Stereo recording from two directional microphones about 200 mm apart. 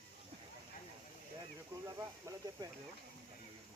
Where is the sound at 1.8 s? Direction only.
15° right (ahead or behind).